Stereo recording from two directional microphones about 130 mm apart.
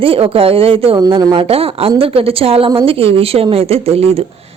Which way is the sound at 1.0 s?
30° right (ahead or behind).